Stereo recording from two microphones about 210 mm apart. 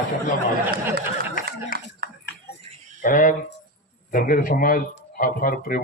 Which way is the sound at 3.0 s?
40° left (ahead or behind).